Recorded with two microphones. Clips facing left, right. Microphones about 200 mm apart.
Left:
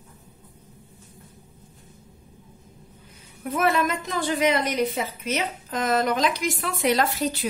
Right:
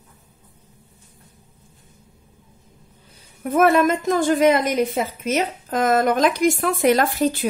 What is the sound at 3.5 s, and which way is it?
A woman's voice, 50° right (ahead or behind).